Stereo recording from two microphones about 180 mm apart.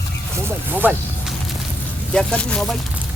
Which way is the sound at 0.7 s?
10° right (ahead or behind).